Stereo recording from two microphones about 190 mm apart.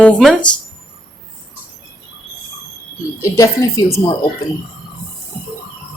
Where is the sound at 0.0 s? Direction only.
5° left (ahead or behind).